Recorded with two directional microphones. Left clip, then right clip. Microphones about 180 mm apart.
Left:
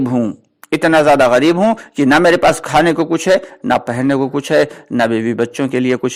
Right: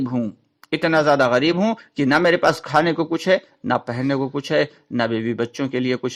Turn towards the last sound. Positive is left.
turn(degrees=30)  # may be behind; listen again after turning